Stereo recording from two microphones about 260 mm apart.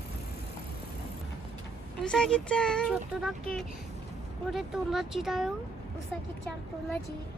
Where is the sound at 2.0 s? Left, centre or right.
Centre.